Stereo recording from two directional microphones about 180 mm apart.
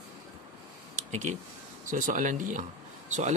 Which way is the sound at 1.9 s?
45° right (ahead or behind).